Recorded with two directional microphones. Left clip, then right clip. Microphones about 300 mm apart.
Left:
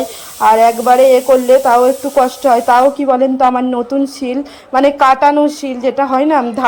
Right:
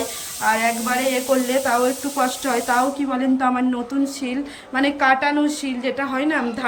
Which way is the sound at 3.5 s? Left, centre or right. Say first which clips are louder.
Left 8 dB; centre.